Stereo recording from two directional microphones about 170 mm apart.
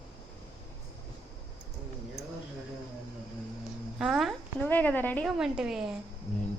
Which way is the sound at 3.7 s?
Centre (ahead or behind).